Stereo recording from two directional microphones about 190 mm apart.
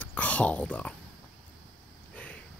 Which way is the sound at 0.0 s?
5° left (ahead or behind).